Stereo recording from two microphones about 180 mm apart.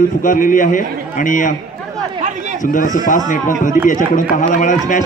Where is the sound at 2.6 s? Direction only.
45° left (ahead or behind).